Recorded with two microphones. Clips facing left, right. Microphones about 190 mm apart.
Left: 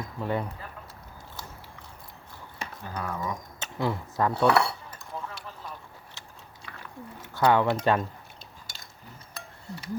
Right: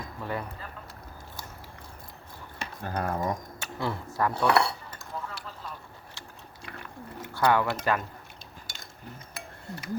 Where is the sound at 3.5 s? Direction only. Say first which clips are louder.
Left 3 dB; 20° left (ahead or behind).